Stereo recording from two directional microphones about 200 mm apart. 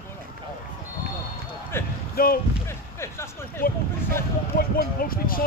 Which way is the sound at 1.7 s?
10° left (ahead or behind).